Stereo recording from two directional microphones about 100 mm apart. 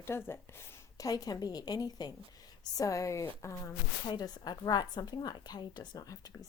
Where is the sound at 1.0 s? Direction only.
35° left (ahead or behind).